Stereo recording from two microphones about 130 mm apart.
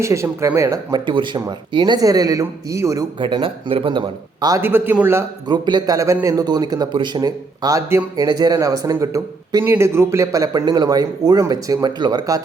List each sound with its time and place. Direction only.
0.0 s a man's voice: 20° right (ahead or behind)
1.0 s a man's voice: 40° right (ahead or behind)
3.2 s a man's voice: 35° right (ahead or behind)
4.6 s a man's voice: 15° right (ahead or behind)
5.5 s a man's voice: 35° right (ahead or behind)